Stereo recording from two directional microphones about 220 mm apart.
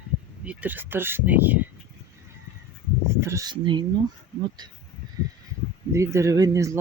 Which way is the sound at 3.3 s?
15° right (ahead or behind).